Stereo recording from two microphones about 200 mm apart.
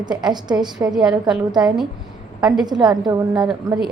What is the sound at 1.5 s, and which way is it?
A woman's voice, 20° right (ahead or behind).